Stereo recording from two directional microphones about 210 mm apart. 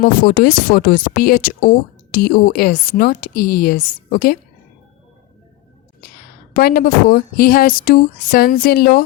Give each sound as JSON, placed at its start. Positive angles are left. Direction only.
{"t": 0.0, "sound": "speech", "side_deg": 45}
{"t": 6.5, "sound": "speech", "side_deg": 45}